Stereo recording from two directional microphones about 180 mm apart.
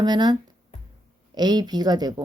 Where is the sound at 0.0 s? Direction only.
25° right (ahead or behind).